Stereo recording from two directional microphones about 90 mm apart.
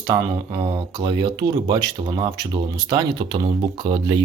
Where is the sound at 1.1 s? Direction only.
65° right (ahead or behind).